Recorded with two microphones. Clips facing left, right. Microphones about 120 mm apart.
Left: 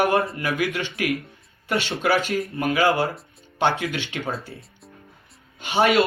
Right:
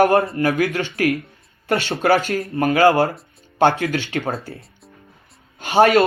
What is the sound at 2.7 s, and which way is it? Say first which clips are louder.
Speech: right 6 dB; 55° right (ahead or behind).